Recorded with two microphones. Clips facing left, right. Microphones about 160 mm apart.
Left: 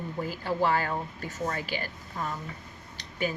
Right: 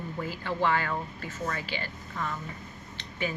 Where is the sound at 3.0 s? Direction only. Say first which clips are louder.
Left 2 dB; 40° left (ahead or behind).